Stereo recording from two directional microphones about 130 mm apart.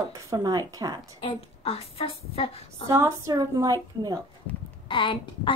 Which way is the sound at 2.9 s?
25° right (ahead or behind).